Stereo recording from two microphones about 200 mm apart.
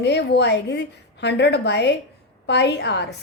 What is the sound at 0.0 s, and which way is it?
Speech, 60° left (ahead or behind).